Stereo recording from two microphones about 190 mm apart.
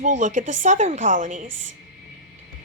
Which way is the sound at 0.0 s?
40° right (ahead or behind).